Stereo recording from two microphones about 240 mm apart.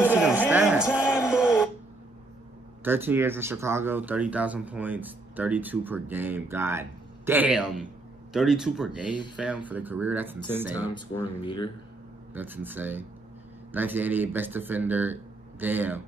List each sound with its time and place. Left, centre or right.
0.0 s music: centre
1.1 s a sound: centre
2.8 s speech: centre
11.4 s speech: centre
12.4 s speech: centre